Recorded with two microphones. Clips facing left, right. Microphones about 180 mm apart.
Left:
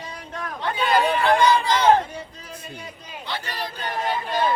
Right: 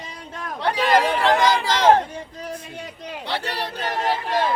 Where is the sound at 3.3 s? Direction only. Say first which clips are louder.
Right 3 dB; 70° right (ahead or behind).